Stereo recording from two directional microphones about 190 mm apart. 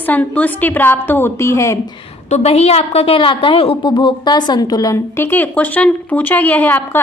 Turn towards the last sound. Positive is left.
turn(degrees=10)  # may be behind; listen again after turning